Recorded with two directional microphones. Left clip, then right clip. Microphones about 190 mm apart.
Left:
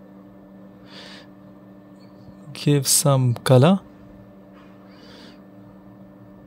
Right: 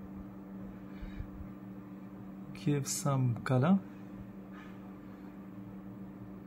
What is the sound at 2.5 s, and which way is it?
Speech, 55° left (ahead or behind).